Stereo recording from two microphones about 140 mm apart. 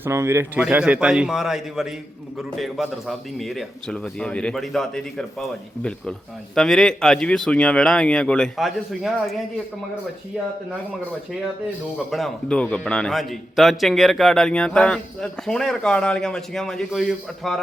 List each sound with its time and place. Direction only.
0.0 s a man's voice: 20° right (ahead or behind); by 9.3 s centre (ahead or behind)
12.1 s a man's voice: 5° left (ahead or behind)